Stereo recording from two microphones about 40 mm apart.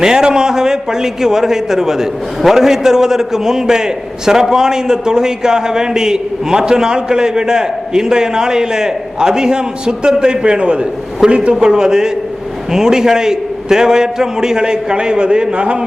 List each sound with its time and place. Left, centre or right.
0.0 s a man's voice: centre